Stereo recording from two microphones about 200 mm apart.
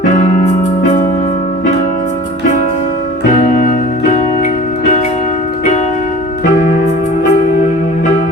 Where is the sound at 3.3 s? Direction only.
40° left (ahead or behind).